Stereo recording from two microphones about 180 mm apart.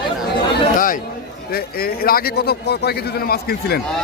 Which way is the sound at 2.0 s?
60° left (ahead or behind).